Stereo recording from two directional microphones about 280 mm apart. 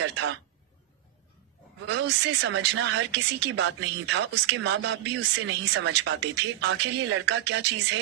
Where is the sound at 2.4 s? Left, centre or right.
Right.